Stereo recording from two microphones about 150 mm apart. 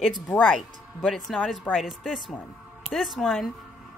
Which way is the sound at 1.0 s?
Centre (ahead or behind).